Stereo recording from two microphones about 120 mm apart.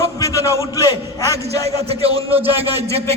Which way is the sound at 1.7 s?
55° right (ahead or behind).